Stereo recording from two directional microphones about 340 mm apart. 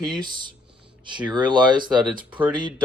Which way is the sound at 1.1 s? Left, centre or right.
Centre.